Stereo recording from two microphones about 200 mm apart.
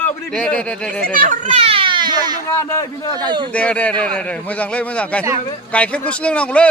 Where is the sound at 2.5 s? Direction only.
15° left (ahead or behind).